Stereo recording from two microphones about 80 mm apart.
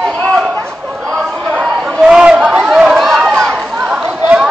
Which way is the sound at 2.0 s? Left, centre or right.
Centre.